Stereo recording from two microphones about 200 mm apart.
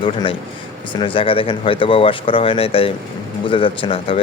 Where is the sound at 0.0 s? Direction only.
25° left (ahead or behind).